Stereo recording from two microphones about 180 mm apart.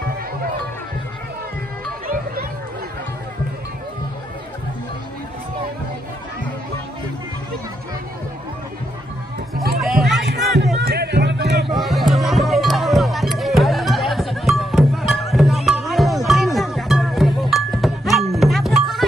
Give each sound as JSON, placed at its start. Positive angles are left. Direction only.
{"t": 9.8, "sound": "music", "side_deg": 0}
{"t": 10.1, "sound": "music", "side_deg": -70}
{"t": 11.7, "sound": "music", "side_deg": 0}